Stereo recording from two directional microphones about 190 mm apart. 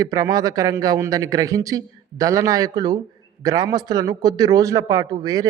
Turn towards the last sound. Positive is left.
turn(degrees=-20)  # may be behind; listen again after turning